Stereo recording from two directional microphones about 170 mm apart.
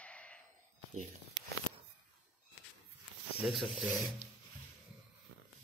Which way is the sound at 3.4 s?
Centre (ahead or behind).